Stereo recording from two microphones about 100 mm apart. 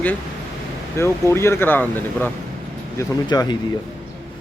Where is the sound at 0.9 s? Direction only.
25° left (ahead or behind).